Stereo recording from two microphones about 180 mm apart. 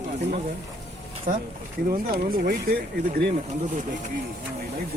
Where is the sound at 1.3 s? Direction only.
50° right (ahead or behind).